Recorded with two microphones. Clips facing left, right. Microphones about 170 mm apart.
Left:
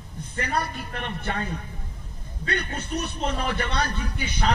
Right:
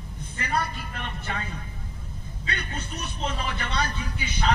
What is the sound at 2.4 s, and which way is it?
A man's voice, 55° left (ahead or behind).